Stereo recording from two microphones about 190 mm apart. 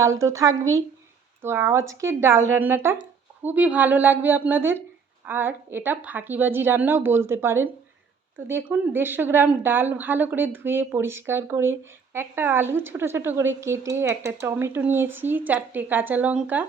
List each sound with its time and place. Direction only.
0.0 s a woman's voice: 15° right (ahead or behind)